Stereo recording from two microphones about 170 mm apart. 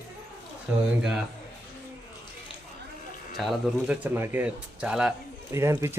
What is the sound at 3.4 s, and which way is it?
Speech, centre (ahead or behind).